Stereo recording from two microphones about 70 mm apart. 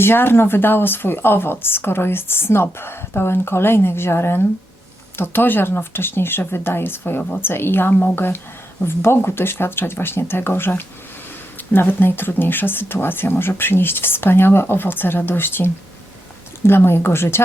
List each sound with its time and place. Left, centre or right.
0.0 s a woman's voice: left